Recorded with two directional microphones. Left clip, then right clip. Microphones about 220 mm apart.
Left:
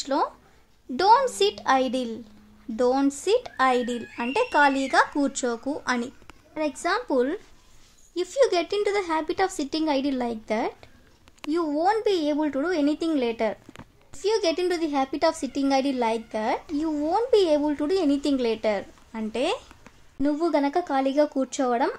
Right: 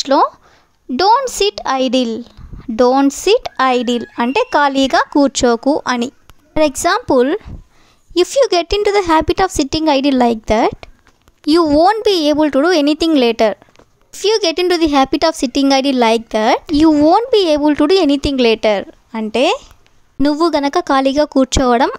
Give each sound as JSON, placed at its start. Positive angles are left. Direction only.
{"t": 0.0, "sound": "a woman's voice", "side_deg": -40}